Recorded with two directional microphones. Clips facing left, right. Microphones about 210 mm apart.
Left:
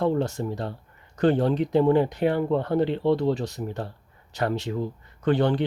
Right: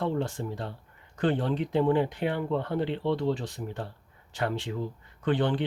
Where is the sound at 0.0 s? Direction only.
40° left (ahead or behind).